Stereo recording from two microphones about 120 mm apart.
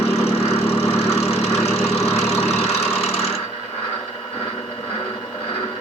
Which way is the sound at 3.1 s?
60° left (ahead or behind).